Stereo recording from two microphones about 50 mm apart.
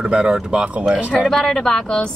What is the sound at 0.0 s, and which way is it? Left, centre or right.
Speech, centre.